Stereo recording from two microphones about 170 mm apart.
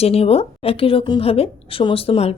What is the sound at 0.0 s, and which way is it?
A woman's voice, 35° left (ahead or behind).